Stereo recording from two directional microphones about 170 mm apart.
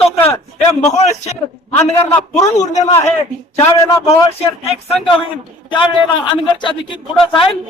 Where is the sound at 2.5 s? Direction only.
45° left (ahead or behind).